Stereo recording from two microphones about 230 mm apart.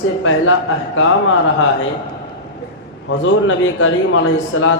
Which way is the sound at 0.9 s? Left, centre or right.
Left.